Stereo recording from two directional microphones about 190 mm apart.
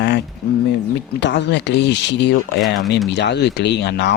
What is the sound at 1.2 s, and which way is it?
Speech, 65° left (ahead or behind).